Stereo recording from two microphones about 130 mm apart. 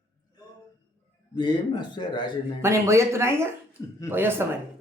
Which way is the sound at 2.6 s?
20° right (ahead or behind).